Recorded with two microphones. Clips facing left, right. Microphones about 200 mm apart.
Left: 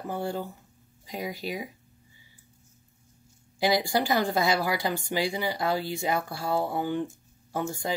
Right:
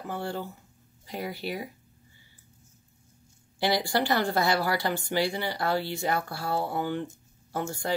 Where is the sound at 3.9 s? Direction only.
15° left (ahead or behind).